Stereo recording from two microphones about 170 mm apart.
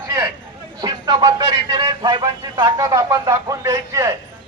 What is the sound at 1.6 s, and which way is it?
Speech, 25° right (ahead or behind).